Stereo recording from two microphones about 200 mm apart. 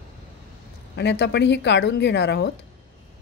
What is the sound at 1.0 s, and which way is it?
Speech, 60° left (ahead or behind).